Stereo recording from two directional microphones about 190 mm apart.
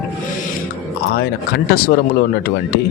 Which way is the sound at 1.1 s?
55° left (ahead or behind).